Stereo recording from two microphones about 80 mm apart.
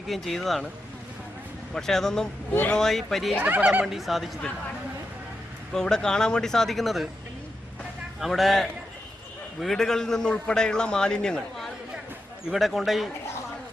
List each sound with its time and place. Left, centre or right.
0.1 s speech: centre
1.7 s speech: centre
2.5 s speech: left
2.7 s speech: centre
3.3 s speech: right
3.8 s speech: centre
5.7 s a man's voice: centre
8.2 s a man's voice: centre